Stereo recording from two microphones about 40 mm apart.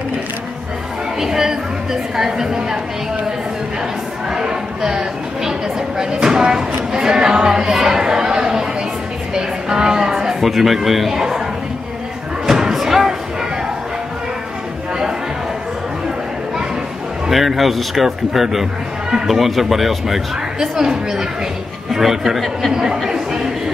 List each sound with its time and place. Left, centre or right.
1.2 s a woman's voice: centre
4.3 s speech: centre
9.3 s chatter: centre
10.5 s speech: centre
12.4 s a sound: centre
17.3 s speech: centre
23.0 s a sound: centre